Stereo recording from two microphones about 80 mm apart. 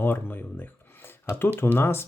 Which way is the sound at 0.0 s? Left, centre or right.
Left.